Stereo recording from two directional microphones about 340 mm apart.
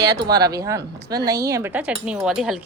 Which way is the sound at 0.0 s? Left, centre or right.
Centre.